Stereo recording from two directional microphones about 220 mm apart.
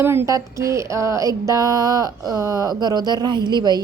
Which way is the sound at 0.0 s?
10° right (ahead or behind).